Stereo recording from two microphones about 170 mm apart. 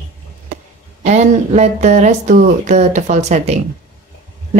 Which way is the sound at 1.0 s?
40° right (ahead or behind).